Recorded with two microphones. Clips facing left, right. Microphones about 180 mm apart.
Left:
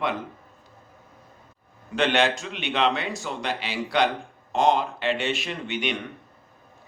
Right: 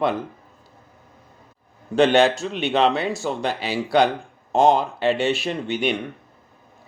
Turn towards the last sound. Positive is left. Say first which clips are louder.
# right 6 dB
turn(degrees=-35)  # may be behind; listen again after turning